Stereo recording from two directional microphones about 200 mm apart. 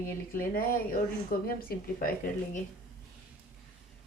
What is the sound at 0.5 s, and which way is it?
Speech, 45° left (ahead or behind).